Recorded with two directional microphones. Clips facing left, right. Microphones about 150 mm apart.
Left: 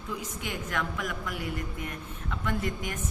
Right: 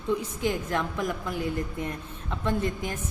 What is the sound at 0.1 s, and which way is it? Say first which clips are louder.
A woman's voice: right 9 dB; 30° right (ahead or behind).